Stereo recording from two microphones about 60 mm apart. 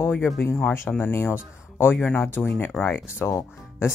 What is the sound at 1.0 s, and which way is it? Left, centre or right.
Speech, left.